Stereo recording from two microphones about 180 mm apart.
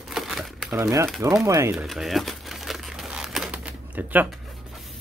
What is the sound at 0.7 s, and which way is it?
Speech, 15° right (ahead or behind).